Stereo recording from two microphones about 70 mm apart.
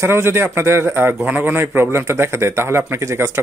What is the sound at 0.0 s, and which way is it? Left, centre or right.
Speech, right.